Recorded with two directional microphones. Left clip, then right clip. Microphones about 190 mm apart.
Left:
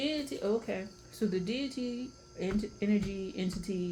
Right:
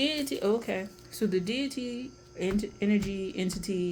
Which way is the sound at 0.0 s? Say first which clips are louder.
Right 5 dB; 60° right (ahead or behind).